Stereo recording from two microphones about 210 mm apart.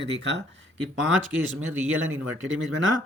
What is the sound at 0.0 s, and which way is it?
Speech, 55° right (ahead or behind).